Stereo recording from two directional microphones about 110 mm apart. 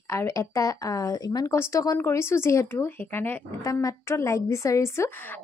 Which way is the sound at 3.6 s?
30° left (ahead or behind).